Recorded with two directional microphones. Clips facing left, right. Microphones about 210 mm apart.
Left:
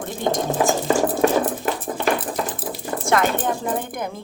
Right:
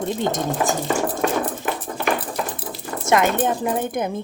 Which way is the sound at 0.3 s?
20° right (ahead or behind).